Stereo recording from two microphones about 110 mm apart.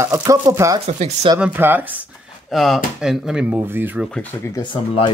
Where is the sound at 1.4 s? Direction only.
15° right (ahead or behind).